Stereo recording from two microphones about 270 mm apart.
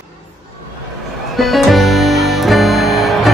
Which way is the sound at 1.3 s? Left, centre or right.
Centre.